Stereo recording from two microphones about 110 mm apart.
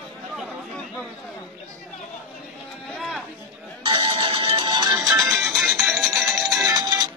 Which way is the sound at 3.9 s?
55° right (ahead or behind).